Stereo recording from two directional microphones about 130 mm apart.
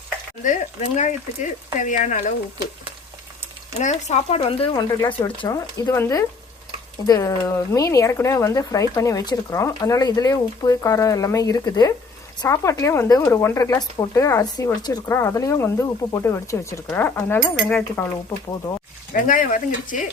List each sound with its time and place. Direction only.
0.4 s speech: 65° left (ahead or behind)
3.8 s speech: 60° left (ahead or behind)
4.7 s speech: 30° left (ahead or behind); by 18.0 s 10° left (ahead or behind)
19.1 s speech: 90° left